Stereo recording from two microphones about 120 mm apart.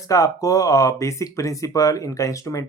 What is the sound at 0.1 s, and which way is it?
Speech, 30° left (ahead or behind).